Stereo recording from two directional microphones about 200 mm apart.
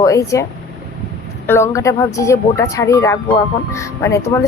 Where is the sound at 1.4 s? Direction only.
10° left (ahead or behind).